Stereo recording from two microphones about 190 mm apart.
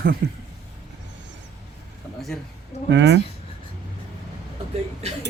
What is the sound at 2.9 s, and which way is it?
Speech, 70° right (ahead or behind).